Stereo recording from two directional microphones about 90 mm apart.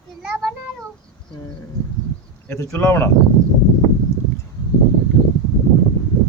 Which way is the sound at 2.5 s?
30° left (ahead or behind).